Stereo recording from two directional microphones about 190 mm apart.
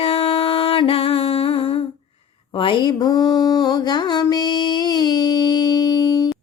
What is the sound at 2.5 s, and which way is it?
Mantra, 25° left (ahead or behind).